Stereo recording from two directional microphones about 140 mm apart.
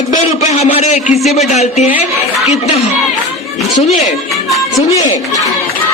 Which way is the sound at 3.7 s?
55° left (ahead or behind).